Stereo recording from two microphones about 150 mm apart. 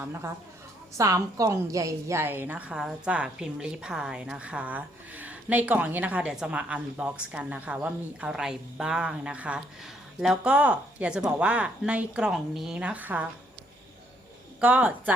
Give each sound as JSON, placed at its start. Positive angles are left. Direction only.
{"t": 0.0, "sound": "a woman's voice", "side_deg": -15}
{"t": 14.6, "sound": "a woman's voice", "side_deg": -10}